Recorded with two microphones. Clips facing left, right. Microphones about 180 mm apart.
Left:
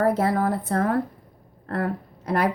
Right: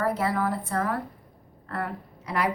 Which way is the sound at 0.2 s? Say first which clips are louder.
Left 4 dB; 45° left (ahead or behind).